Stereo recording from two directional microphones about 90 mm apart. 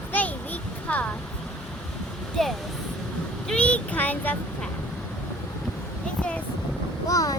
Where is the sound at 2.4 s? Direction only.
5° left (ahead or behind).